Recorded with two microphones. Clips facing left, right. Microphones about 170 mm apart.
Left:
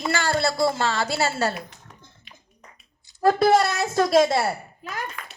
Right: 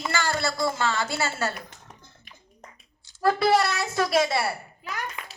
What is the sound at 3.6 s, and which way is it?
Speech, 45° left (ahead or behind).